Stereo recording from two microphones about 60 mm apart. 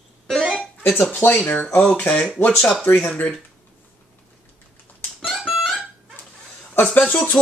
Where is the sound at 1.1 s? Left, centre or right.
Left.